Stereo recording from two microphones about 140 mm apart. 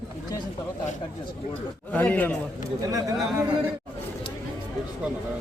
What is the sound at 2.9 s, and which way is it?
Speech, 25° right (ahead or behind).